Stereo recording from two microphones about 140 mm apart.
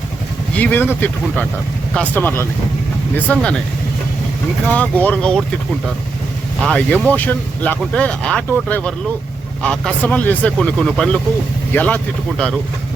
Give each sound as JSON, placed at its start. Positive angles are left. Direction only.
{"t": 0.5, "sound": "speech", "side_deg": 10}
{"t": 4.7, "sound": "speech", "side_deg": 10}
{"t": 6.6, "sound": "speech", "side_deg": 5}